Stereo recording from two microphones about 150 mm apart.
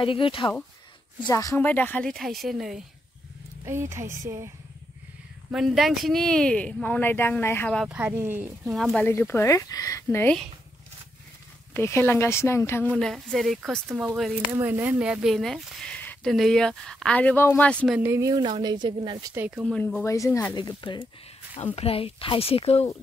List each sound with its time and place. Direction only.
0.0 s speech: 35° left (ahead or behind)
1.2 s speech: 20° left (ahead or behind); by 2.8 s centre (ahead or behind)
3.6 s speech: 20° right (ahead or behind)
5.5 s speech: centre (ahead or behind); by 7.7 s 15° left (ahead or behind)
7.7 s speech: 5° right (ahead or behind)
9.0 s speech: 15° left (ahead or behind)
11.7 s speech: 15° left (ahead or behind)
12.9 s speech: centre (ahead or behind)
17.8 s speech: 5° right (ahead or behind)
18.1 s speech: 25° right (ahead or behind)
19.3 s speech: 10° right (ahead or behind)
19.7 s speech: 10° left (ahead or behind)
20.5 s speech: 30° left (ahead or behind)